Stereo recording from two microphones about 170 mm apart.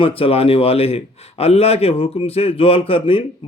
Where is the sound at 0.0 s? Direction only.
35° left (ahead or behind).